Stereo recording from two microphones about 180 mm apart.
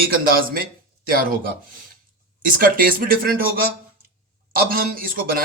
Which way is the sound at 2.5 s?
55° right (ahead or behind).